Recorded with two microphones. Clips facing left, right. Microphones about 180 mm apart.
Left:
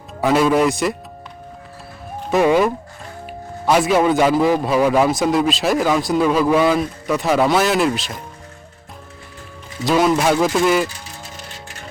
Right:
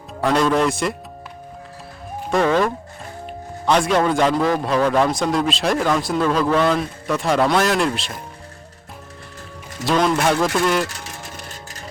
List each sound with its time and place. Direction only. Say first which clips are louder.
0.2 s a man's voice: left 2 dB; 5° left (ahead or behind)
2.3 s a man's voice: left 3 dB; 10° left (ahead or behind)
9.7 s a man's voice: left 2 dB; 5° left (ahead or behind)
10.8 s speech: even; 90° right